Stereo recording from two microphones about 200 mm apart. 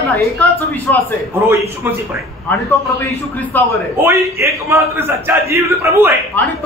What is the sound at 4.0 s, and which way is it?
A man's voice, 15° right (ahead or behind).